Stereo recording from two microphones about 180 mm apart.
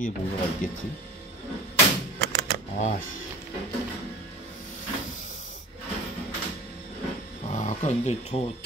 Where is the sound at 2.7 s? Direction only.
45° left (ahead or behind).